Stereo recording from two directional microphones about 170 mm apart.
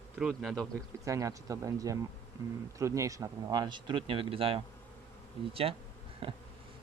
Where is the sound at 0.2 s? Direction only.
Centre (ahead or behind).